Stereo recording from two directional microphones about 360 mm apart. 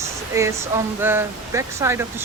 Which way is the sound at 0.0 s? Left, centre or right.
Centre.